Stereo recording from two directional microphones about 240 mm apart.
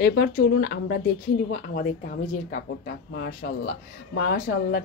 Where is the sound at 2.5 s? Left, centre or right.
Left.